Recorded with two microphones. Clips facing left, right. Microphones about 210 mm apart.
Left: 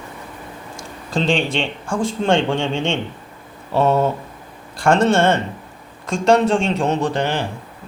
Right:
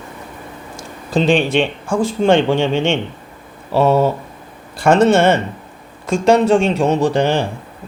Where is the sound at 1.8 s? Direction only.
Centre (ahead or behind).